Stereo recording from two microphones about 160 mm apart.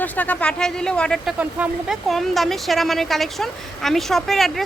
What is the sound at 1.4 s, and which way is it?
Speech, 10° right (ahead or behind).